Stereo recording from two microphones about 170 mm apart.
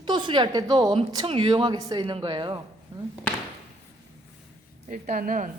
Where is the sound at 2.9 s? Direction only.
20° right (ahead or behind).